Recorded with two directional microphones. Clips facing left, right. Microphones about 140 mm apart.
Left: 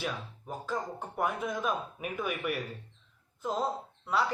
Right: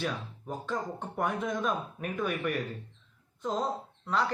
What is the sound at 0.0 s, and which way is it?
Speech, 5° left (ahead or behind).